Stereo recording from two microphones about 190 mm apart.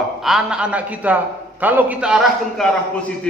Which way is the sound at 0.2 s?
Centre (ahead or behind).